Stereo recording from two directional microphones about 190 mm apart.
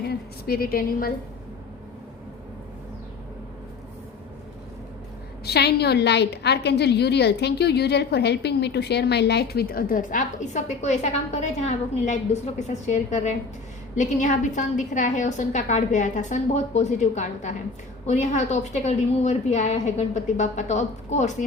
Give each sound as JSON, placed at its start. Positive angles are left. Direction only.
{"t": 0.0, "sound": "a woman's voice", "side_deg": 55}
{"t": 5.5, "sound": "a woman's voice", "side_deg": 60}